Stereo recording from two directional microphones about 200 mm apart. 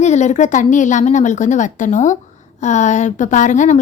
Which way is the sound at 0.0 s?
35° left (ahead or behind).